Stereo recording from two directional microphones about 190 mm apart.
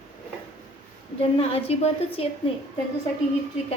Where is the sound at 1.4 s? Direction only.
35° left (ahead or behind).